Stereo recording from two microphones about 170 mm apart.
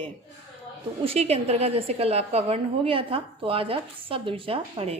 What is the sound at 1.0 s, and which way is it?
A woman's voice, 35° right (ahead or behind).